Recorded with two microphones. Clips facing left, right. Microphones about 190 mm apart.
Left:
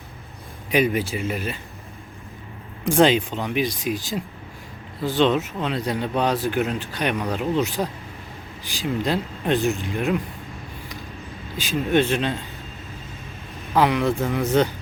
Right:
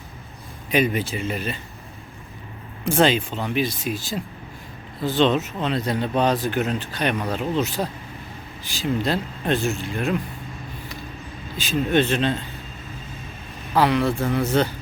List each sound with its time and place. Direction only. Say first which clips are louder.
0.7 s speech: left 1 dB; 10° left (ahead or behind)
2.8 s speech: left 2 dB; 15° left (ahead or behind)
11.5 s speech: even; 10° left (ahead or behind)
13.7 s speech: even; 15° left (ahead or behind)